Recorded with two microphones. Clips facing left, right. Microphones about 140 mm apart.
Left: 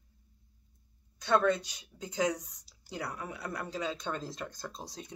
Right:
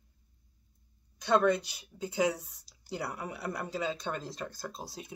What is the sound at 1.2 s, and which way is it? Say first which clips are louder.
Speech: right 1 dB; 15° right (ahead or behind).